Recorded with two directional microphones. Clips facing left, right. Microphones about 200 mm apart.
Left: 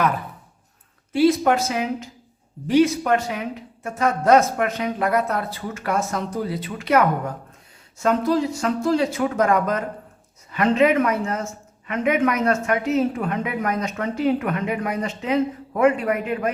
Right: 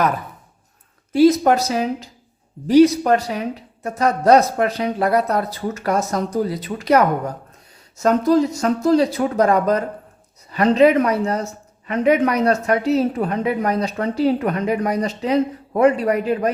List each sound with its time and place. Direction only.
1.1 s speech: 40° right (ahead or behind)